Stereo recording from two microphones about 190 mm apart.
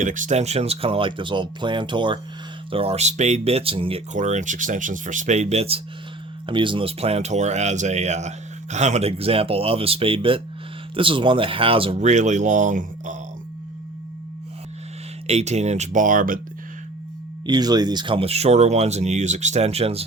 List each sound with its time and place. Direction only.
0.0 s speech: 40° right (ahead or behind)
15.3 s speech: 35° right (ahead or behind)
17.4 s speech: 20° right (ahead or behind)